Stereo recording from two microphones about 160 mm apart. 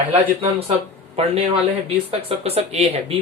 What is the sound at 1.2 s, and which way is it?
Speech, 35° right (ahead or behind).